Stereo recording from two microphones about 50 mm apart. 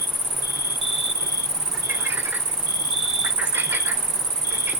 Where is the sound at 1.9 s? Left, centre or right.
Right.